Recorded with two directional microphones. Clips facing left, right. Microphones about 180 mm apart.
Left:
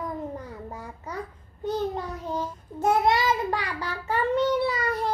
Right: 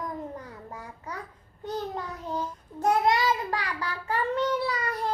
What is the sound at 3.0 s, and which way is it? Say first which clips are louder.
Child singing: left 2 dB; 25° left (ahead or behind).